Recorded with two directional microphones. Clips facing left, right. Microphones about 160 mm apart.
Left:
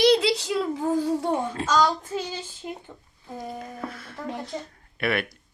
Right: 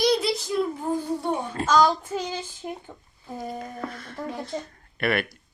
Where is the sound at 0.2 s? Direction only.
85° left.